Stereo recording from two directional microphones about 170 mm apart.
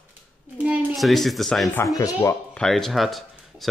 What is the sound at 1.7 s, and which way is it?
Speech, 20° left (ahead or behind).